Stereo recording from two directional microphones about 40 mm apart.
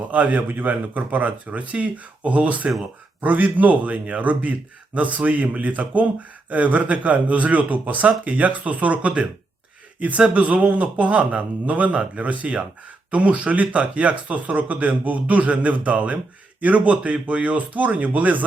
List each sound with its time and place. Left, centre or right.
0.1 s speech: right
2.6 s speech: centre
3.2 s speech: right